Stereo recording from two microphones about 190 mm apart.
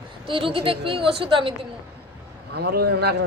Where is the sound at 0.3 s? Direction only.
25° right (ahead or behind).